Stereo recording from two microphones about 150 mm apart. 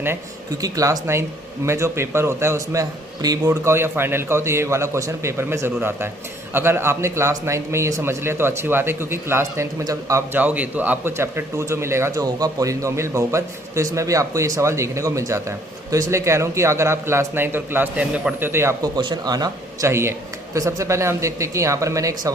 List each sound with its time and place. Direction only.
0.6 s a man's voice: 20° right (ahead or behind)